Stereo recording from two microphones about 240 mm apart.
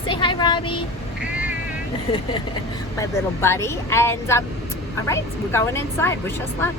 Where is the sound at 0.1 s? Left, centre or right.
Centre.